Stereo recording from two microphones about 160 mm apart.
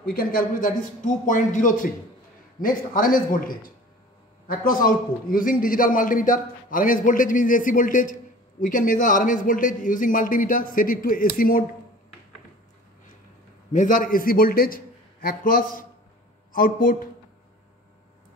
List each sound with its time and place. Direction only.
0.0 s a man's voice: 65° left (ahead or behind)
13.7 s a man's voice: 55° left (ahead or behind)